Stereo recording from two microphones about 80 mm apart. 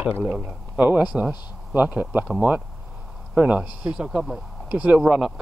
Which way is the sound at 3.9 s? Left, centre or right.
Centre.